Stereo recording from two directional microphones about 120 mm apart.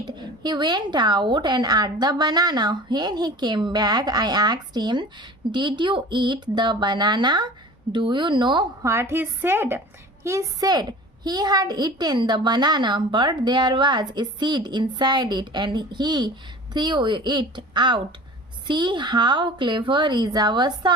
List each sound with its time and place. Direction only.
0.2 s a child's voice: 35° right (ahead or behind)
8.8 s a woman's voice: 25° right (ahead or behind); by 20.9 s 40° right (ahead or behind)